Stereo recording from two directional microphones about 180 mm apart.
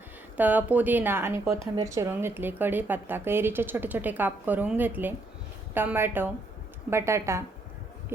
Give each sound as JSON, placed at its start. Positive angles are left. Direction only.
{"t": 0.3, "sound": "speech", "side_deg": -10}